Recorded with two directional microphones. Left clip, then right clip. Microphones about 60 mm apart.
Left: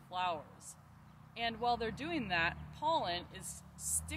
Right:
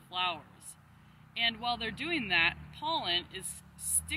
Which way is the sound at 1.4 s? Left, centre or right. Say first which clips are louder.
Right 3 dB; left.